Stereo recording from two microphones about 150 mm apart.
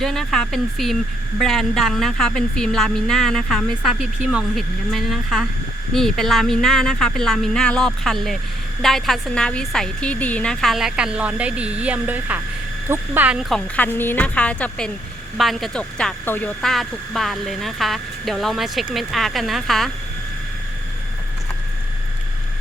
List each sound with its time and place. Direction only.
0.0 s speech: centre (ahead or behind)
13.7 s a woman's voice: 15° left (ahead or behind)